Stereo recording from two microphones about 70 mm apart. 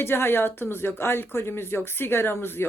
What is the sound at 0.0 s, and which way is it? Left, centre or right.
Speech, left.